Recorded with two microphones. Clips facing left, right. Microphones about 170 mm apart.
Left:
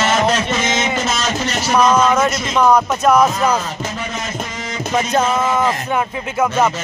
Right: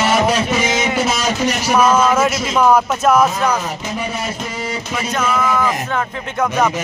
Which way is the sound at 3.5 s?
15° right (ahead or behind).